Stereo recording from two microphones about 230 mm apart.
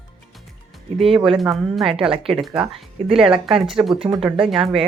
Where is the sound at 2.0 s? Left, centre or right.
Right.